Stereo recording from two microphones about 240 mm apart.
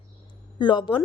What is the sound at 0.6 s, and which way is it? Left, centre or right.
Speech, centre.